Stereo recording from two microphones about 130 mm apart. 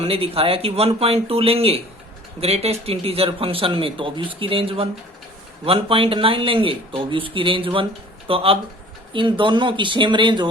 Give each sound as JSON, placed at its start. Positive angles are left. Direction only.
{"t": 0.0, "sound": "a man's voice", "side_deg": -50}